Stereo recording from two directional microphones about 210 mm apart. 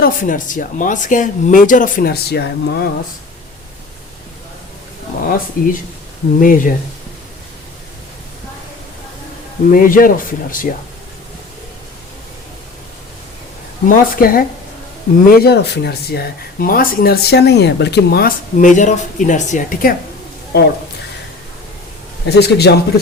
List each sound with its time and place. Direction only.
0.0 s speech: 40° left (ahead or behind)
5.6 s speech: 40° left (ahead or behind)
9.7 s speech: 40° left (ahead or behind)
13.8 s speech: 45° left (ahead or behind)
22.3 s speech: 55° left (ahead or behind)